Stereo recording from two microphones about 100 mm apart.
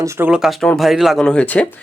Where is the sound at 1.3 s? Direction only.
10° left (ahead or behind).